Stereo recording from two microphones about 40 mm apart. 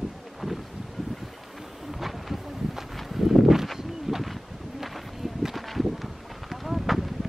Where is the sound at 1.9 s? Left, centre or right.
Centre.